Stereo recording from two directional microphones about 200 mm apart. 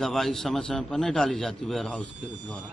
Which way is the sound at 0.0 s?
Centre (ahead or behind).